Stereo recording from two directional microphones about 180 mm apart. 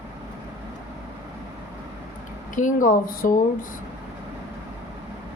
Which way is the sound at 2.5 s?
45° left (ahead or behind).